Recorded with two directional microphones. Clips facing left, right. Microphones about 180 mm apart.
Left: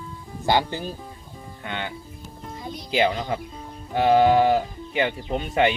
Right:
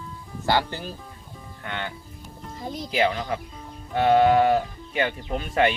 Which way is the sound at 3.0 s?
25° left (ahead or behind).